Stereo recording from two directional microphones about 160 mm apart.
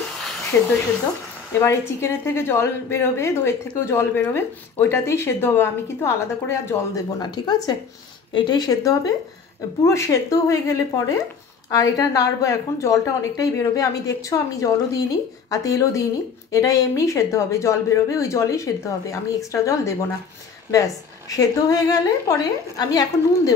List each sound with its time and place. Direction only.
0.5 s a woman's voice: 15° left (ahead or behind)
7.2 s a woman's voice: 25° left (ahead or behind)